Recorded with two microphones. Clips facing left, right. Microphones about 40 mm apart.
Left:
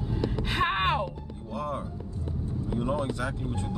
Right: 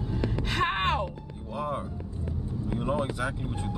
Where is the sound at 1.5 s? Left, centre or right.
Centre.